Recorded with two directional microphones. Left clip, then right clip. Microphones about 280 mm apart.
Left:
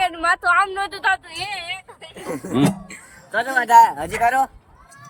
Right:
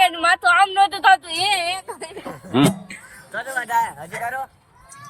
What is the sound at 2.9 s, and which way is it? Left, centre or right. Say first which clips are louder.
Speech: left 6 dB; left.